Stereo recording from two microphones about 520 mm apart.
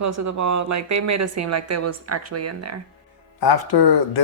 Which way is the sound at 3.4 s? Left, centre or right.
Left.